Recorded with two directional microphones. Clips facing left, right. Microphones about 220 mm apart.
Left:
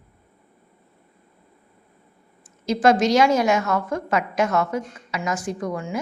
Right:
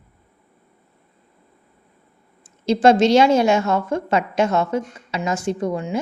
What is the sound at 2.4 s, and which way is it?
A woman's voice, 25° right (ahead or behind).